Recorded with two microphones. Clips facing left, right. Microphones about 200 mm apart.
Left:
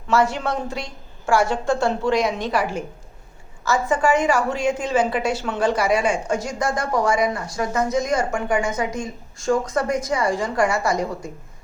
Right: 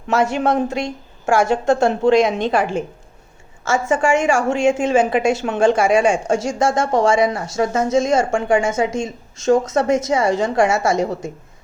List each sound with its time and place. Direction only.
0.1 s speech: 20° right (ahead or behind)
6.2 s speech: 90° right
7.2 s speech: 25° right (ahead or behind)